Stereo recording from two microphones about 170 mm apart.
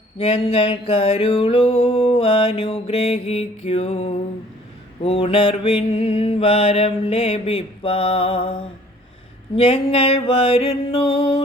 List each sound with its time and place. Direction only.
0.2 s mantra: 35° left (ahead or behind)
9.6 s mantra: 35° left (ahead or behind)